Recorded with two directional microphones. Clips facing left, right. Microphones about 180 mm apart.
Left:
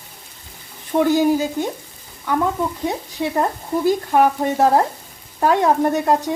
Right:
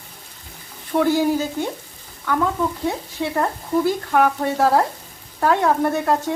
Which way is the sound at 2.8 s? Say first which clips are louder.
Left 1 dB; 15° left (ahead or behind).